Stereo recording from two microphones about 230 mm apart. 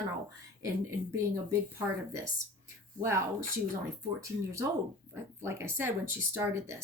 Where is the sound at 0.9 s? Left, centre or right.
Centre.